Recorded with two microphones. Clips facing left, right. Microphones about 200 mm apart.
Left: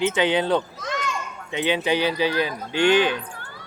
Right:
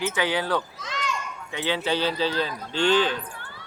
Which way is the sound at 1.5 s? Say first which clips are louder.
Left 4 dB; 20° left (ahead or behind).